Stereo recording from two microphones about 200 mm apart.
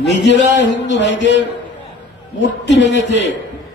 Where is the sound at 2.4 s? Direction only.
60° left (ahead or behind).